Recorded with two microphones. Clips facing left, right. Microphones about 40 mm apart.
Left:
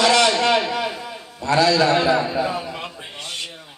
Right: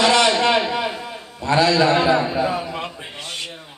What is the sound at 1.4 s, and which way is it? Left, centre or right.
A man's voice, right.